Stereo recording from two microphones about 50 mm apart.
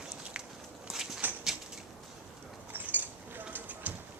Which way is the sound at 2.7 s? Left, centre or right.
Right.